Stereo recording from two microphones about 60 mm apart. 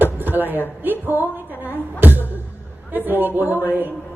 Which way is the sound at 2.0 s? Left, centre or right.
Right.